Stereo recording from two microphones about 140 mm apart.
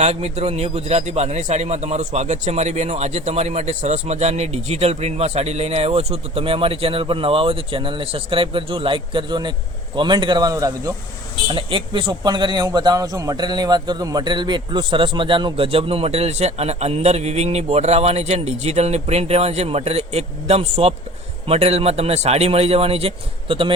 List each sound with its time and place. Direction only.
0.0 s a man's voice: 50° right (ahead or behind); by 10.9 s 25° right (ahead or behind)
11.4 s a man's voice: 35° right (ahead or behind)